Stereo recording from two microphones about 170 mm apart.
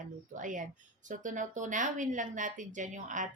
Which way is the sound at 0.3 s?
50° right (ahead or behind).